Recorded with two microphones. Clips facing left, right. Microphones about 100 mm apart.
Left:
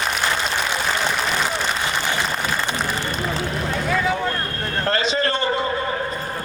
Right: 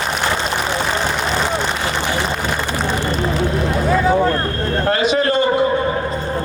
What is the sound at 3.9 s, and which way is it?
Vehicle, 35° right (ahead or behind).